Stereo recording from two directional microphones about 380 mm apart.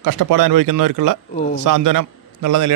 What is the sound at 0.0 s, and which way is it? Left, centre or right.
A man's voice, right.